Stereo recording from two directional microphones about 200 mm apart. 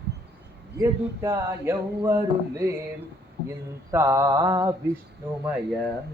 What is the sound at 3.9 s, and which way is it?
Speech, 15° right (ahead or behind).